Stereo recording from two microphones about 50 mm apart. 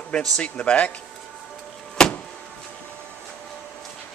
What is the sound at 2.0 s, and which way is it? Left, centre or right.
Vehicle, centre.